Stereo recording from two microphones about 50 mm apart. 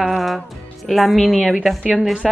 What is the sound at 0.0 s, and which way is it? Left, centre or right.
Music, centre.